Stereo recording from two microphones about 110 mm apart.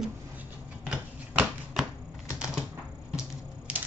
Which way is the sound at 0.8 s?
10° right (ahead or behind).